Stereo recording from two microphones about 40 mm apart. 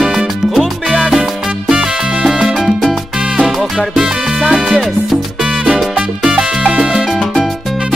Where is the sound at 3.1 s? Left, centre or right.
Right.